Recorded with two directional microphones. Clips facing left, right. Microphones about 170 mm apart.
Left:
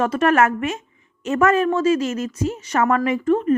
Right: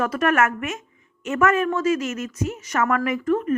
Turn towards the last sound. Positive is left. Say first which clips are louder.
# left 4 dB
turn(degrees=30)  # may be behind; listen again after turning